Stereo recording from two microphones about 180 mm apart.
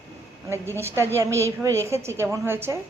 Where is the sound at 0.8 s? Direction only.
15° right (ahead or behind).